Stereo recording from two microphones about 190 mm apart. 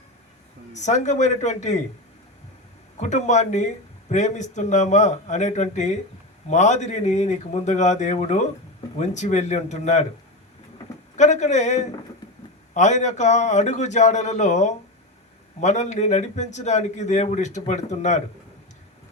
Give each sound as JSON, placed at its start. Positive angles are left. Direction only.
{"t": 0.7, "sound": "a man's voice", "side_deg": 40}
{"t": 3.0, "sound": "a man's voice", "side_deg": 40}
{"t": 11.2, "sound": "a man's voice", "side_deg": 40}